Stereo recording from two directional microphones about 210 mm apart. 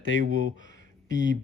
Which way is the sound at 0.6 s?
60° left (ahead or behind).